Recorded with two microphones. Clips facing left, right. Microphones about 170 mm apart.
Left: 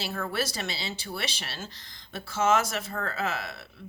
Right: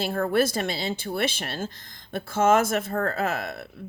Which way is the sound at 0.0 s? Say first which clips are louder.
Right 8 dB; 50° right (ahead or behind).